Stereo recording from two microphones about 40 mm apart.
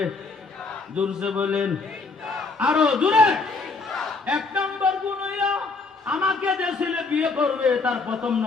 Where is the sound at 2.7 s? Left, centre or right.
Right.